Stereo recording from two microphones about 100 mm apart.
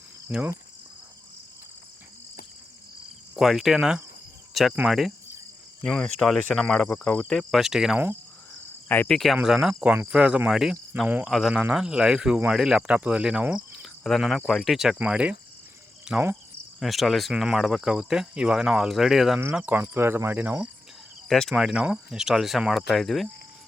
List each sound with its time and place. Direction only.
0.3 s speech: 10° right (ahead or behind)
3.3 s speech: centre (ahead or behind)
5.8 s cricket: 5° left (ahead or behind)
7.3 s speech: centre (ahead or behind)
8.9 s cricket: 20° left (ahead or behind)
9.1 s speech: centre (ahead or behind)
13.8 s speech: centre (ahead or behind)
16.1 s cricket: 5° right (ahead or behind)
16.8 s speech: centre (ahead or behind)
21.2 s speech: 5° left (ahead or behind)
21.5 s speech: 10° right (ahead or behind)